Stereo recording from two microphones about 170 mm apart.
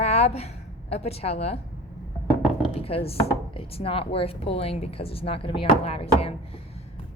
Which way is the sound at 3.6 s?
35° left (ahead or behind).